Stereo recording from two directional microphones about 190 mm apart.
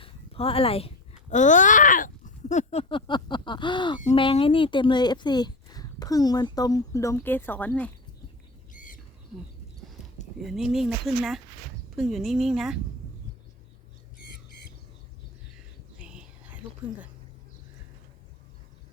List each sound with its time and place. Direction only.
0.0 s speech: 30° left (ahead or behind); by 7.9 s 10° left (ahead or behind)
8.7 s squawk: 45° left (ahead or behind)
10.4 s speech: centre (ahead or behind)
16.0 s whispering: 5° right (ahead or behind)